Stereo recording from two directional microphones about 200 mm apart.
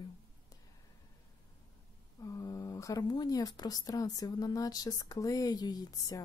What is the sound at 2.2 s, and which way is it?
Speech, 15° left (ahead or behind).